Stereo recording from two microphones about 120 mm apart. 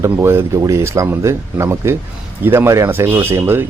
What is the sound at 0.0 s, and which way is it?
Speech, 20° right (ahead or behind).